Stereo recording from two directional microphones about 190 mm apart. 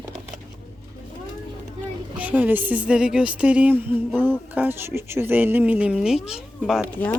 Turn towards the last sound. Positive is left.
turn(degrees=-5)  # may be behind; listen again after turning